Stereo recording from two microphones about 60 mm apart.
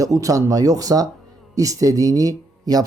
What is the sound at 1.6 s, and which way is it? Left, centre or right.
Speech, right.